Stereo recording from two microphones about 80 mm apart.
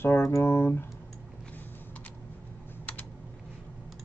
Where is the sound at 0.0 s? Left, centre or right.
Left.